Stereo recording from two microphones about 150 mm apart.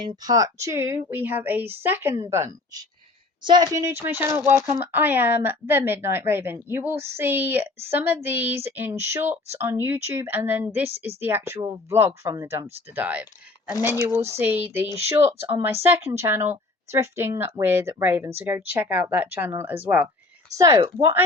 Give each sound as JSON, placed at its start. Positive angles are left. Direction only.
{"t": 0.0, "sound": "a woman's voice", "side_deg": -30}
{"t": 20.6, "sound": "a woman's voice", "side_deg": -20}